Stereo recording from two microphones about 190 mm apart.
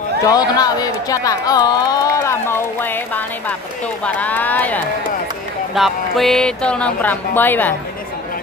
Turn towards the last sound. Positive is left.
turn(degrees=10)  # may be behind; listen again after turning